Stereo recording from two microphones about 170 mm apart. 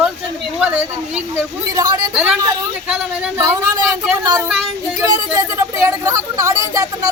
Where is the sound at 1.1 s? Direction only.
15° right (ahead or behind).